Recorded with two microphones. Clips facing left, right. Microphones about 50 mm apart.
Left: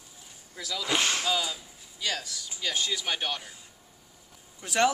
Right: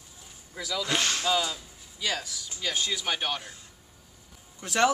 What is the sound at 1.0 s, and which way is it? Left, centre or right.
Speech, left.